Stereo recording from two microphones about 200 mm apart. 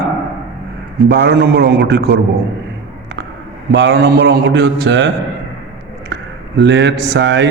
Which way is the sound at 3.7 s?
60° right (ahead or behind).